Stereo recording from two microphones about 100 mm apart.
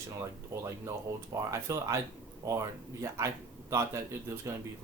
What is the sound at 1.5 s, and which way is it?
Speech, 30° right (ahead or behind).